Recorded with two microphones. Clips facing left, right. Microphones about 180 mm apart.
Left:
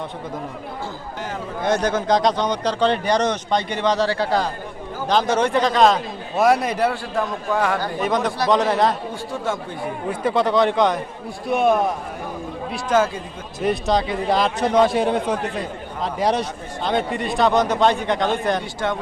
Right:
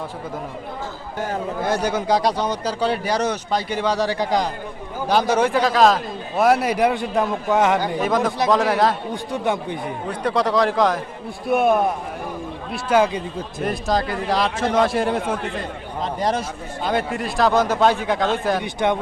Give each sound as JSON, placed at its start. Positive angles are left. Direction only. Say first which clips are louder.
{"t": 1.6, "sound": "speech", "louder": "left 3 dB", "side_deg": -10}
{"t": 7.9, "sound": "a man's voice", "louder": "right 1 dB", "side_deg": 0}
{"t": 9.3, "sound": "speech", "louder": "right 4 dB", "side_deg": -15}
{"t": 10.1, "sound": "a man's voice", "louder": "left 1 dB", "side_deg": 0}
{"t": 12.7, "sound": "speech", "louder": "right 1 dB", "side_deg": -15}
{"t": 13.7, "sound": "a man's voice", "louder": "left 3 dB", "side_deg": 0}
{"t": 18.6, "sound": "speech", "louder": "right 4 dB", "side_deg": -20}